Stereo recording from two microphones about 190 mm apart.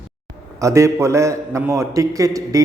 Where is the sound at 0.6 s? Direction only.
15° right (ahead or behind).